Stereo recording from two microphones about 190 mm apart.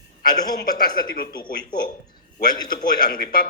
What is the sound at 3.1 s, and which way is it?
Speech, 45° left (ahead or behind).